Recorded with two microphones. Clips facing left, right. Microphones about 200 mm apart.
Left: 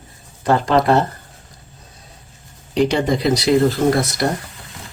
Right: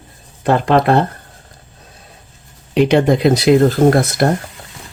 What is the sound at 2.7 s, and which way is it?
Speech, 60° right (ahead or behind).